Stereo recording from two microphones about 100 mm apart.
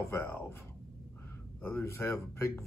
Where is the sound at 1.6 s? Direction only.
25° left (ahead or behind).